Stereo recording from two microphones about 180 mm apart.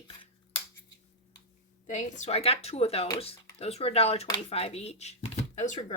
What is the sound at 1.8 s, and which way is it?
Speech, 40° left (ahead or behind).